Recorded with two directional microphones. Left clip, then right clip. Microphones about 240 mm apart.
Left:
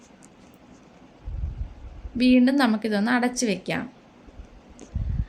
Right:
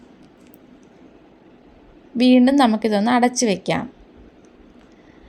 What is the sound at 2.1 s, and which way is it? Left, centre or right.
A woman's voice, centre.